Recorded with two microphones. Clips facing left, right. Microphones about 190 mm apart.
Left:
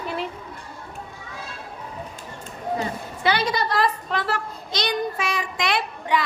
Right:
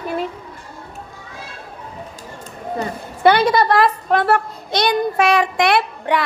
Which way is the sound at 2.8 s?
55° right (ahead or behind).